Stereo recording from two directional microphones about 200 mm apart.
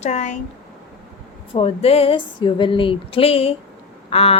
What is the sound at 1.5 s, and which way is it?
A woman's voice, 30° left (ahead or behind).